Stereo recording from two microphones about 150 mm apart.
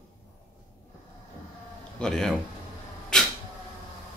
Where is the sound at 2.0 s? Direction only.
5° left (ahead or behind).